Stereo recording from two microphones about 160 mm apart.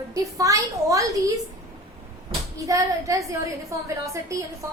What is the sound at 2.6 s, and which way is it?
Child singing, 20° right (ahead or behind).